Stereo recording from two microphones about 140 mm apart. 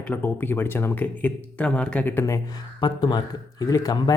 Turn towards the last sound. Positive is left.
turn(degrees=30)  # may be behind; listen again after turning